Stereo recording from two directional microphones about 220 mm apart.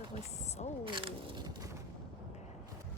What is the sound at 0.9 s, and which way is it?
Zipper, 20° right (ahead or behind).